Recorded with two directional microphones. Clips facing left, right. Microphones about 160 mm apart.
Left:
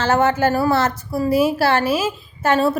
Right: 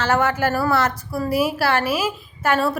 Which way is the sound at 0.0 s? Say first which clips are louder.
Left 3 dB; 25° left (ahead or behind).